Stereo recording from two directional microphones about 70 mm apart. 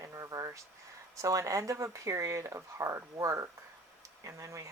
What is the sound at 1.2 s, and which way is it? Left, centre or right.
Speech, right.